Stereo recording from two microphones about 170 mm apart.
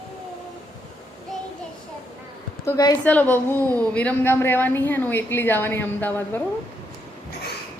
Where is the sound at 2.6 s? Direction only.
20° left (ahead or behind).